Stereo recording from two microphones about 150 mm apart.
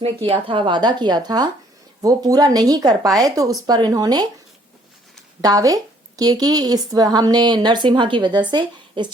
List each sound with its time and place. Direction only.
0.3 s a woman's voice: 35° right (ahead or behind)
5.4 s a woman's voice: 25° right (ahead or behind)